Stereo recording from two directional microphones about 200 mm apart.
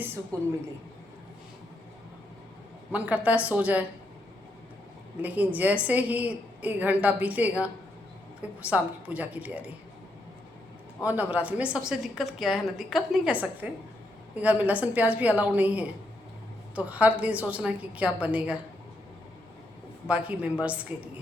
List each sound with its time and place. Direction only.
0.3 s a woman's voice: 15° right (ahead or behind)
2.9 s a woman's voice: 5° right (ahead or behind)
5.2 s a woman's voice: 10° right (ahead or behind)
11.0 s a woman's voice: 5° right (ahead or behind)
20.1 s a woman's voice: 5° right (ahead or behind)